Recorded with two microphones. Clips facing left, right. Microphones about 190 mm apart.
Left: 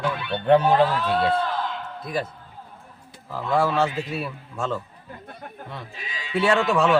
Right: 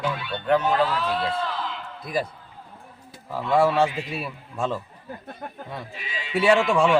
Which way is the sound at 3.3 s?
Centre (ahead or behind).